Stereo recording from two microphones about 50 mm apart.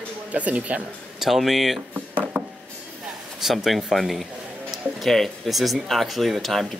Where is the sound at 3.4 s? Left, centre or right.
Centre.